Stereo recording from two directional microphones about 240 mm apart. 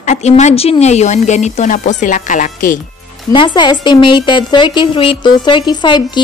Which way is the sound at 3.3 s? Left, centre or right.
Centre.